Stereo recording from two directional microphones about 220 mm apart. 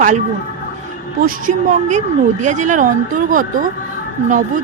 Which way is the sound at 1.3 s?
35° right (ahead or behind).